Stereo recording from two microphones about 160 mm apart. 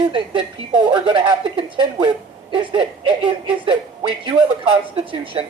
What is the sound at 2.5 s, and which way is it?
Speech, 30° right (ahead or behind).